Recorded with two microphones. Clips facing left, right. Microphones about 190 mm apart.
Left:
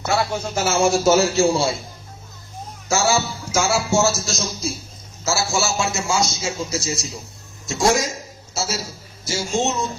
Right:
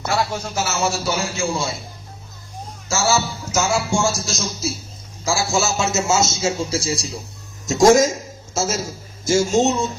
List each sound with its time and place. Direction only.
0.2 s speech: 55° left (ahead or behind); by 1.7 s 35° left (ahead or behind)
2.9 s a man's voice: 15° left (ahead or behind); by 4.7 s centre (ahead or behind)
5.2 s a man's voice: 15° right (ahead or behind); by 7.1 s 30° right (ahead or behind)
7.7 s a man's voice: 45° right (ahead or behind)